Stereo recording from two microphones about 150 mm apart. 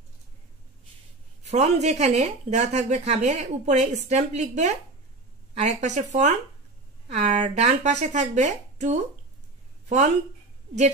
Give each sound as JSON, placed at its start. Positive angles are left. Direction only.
{"t": 1.4, "sound": "speech", "side_deg": -50}